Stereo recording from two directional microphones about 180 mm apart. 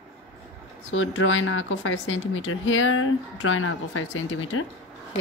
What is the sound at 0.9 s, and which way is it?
Speech, 90° left.